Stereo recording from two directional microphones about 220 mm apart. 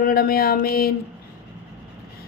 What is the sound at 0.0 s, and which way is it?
Speech, 40° left (ahead or behind).